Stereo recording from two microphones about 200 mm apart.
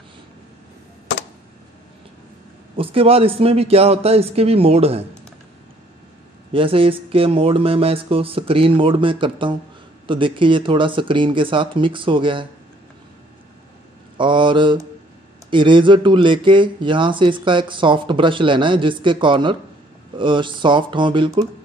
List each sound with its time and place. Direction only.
2.7 s speech: 30° right (ahead or behind)
6.5 s speech: 25° right (ahead or behind)
14.1 s speech: 25° right (ahead or behind)